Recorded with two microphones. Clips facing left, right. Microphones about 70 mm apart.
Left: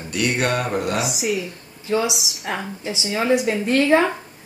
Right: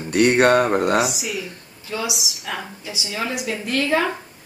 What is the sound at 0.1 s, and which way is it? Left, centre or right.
Speech, right.